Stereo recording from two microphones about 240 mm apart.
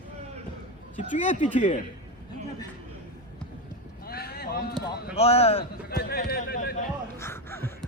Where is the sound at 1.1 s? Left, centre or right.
Left.